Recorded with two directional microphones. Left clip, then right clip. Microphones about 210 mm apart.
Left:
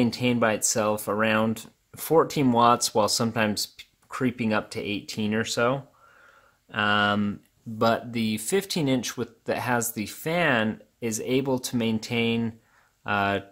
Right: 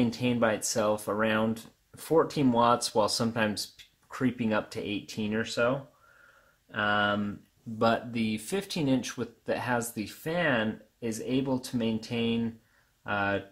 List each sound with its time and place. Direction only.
0.0 s speech: 25° left (ahead or behind)